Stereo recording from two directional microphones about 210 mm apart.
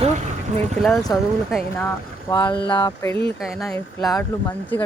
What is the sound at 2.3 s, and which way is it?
Speech, 15° left (ahead or behind).